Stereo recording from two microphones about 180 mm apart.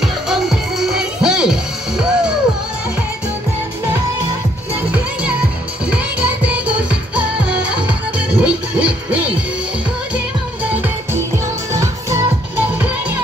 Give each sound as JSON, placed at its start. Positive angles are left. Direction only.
{"t": 0.0, "sound": "music", "side_deg": 0}
{"t": 4.9, "sound": "music", "side_deg": -5}